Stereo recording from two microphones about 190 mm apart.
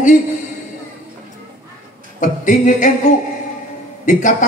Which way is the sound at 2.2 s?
40° left (ahead or behind).